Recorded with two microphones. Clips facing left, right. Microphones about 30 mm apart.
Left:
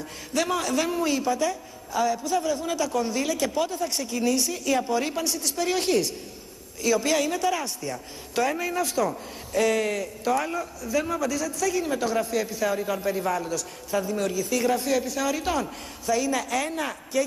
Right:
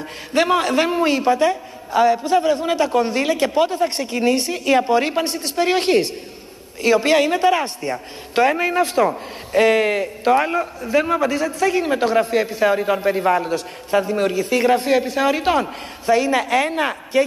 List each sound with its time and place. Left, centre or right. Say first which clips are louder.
0.3 s a man's voice: right 8 dB; right